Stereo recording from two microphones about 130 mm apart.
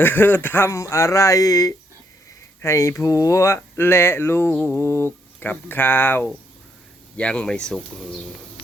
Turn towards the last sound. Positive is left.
turn(degrees=5)  # may be behind; listen again after turning